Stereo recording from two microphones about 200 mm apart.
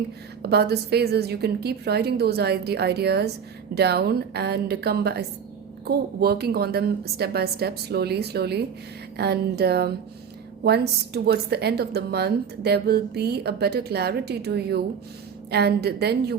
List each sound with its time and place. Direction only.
0.4 s a woman's voice: 55° right (ahead or behind)